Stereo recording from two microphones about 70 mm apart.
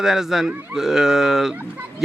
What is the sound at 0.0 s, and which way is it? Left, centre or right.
Speech, centre.